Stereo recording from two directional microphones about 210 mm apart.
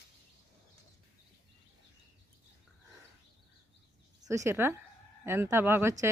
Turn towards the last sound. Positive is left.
turn(degrees=-10)  # may be behind; listen again after turning